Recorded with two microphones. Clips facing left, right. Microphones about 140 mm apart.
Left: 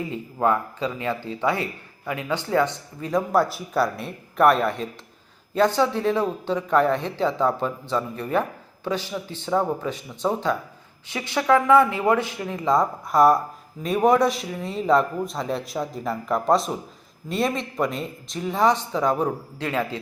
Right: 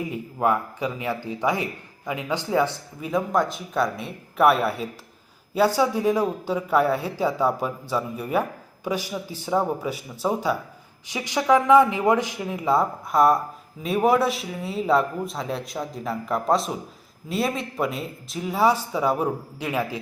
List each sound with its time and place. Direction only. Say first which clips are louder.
0.0 s a man's voice: left 1 dB; 10° right (ahead or behind)